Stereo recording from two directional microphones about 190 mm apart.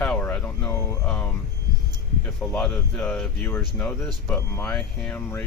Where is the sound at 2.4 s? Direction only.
5° left (ahead or behind).